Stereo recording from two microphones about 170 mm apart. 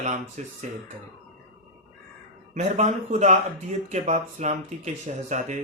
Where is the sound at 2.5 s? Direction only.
40° right (ahead or behind).